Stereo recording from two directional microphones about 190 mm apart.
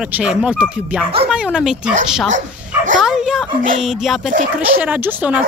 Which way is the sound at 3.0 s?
5° right (ahead or behind).